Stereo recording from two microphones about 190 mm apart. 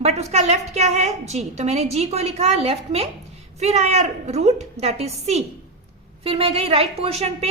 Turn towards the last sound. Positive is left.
turn(degrees=-35)  # may be behind; listen again after turning